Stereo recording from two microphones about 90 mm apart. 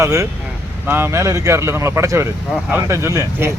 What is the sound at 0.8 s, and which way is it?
Speech, 25° right (ahead or behind).